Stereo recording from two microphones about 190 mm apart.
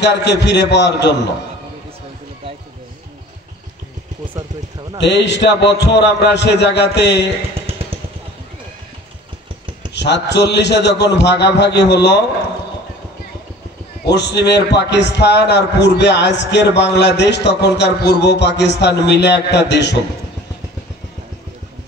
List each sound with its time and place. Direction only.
0.0 s a man's voice: 65° left (ahead or behind)
5.0 s a man's voice: 65° left (ahead or behind)
9.9 s a man's voice: 65° left (ahead or behind)
14.0 s a man's voice: 65° left (ahead or behind)